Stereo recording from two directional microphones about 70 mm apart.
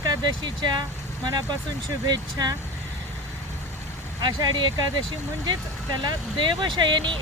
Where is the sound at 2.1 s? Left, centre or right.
Right.